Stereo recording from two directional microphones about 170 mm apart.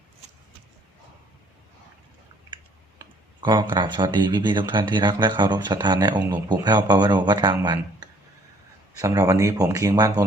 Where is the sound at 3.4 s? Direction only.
25° right (ahead or behind).